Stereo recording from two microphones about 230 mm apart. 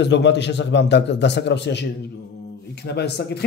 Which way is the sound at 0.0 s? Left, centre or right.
Left.